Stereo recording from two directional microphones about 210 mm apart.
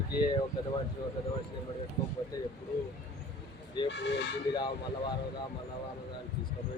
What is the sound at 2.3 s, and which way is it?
Speech, 15° left (ahead or behind).